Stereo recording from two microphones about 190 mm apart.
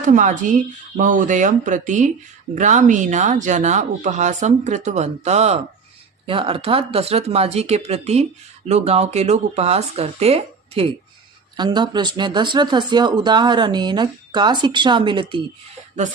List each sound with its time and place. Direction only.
0.0 s speech: 40° right (ahead or behind); by 15.4 s 25° right (ahead or behind)